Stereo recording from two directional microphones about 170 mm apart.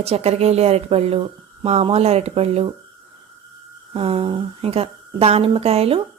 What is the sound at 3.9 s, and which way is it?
A woman's voice, 30° right (ahead or behind).